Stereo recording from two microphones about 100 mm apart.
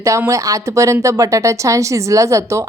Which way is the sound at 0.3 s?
35° right (ahead or behind).